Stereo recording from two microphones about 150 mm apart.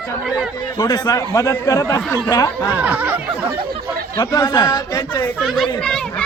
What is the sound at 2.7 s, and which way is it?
Snicker, 10° right (ahead or behind).